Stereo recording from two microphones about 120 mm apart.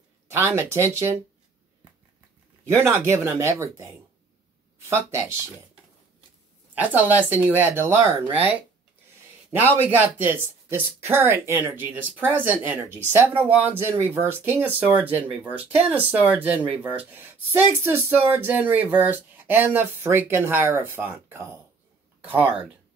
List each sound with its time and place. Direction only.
0.3 s speech: 20° right (ahead or behind)
2.7 s speech: 25° right (ahead or behind)
6.8 s speech: 15° right (ahead or behind)
9.8 s speech: 15° right (ahead or behind)